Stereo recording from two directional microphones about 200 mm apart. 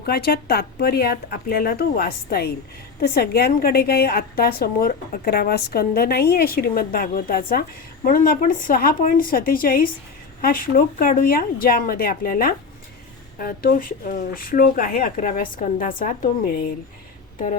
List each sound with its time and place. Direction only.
0.0 s a woman's voice: 50° left (ahead or behind)